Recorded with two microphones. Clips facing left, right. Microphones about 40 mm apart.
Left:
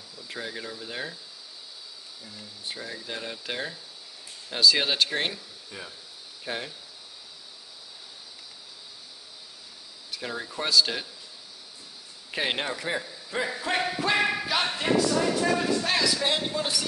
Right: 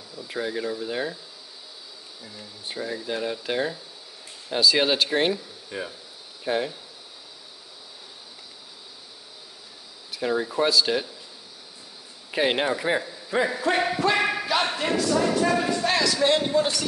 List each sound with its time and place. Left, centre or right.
0.1 s a man's voice: centre
2.2 s a man's voice: centre
5.7 s speech: right
6.4 s speech: centre
10.1 s a man's voice: centre
12.3 s a man's voice: centre
13.9 s a sound: centre
14.8 s a man's voice: centre